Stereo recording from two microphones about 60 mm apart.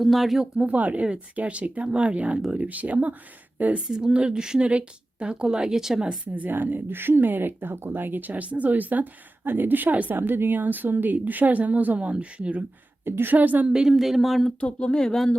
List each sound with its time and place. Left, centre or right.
0.0 s speech: centre
0.5 s speech: centre
0.8 s speech: right
3.8 s speech: centre
6.2 s speech: right
13.1 s speech: right
13.7 s speech: centre
13.9 s speech: centre
14.6 s speech: centre